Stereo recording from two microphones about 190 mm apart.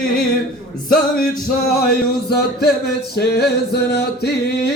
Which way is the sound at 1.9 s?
55° left (ahead or behind).